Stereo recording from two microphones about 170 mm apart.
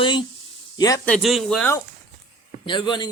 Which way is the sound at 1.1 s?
Centre (ahead or behind).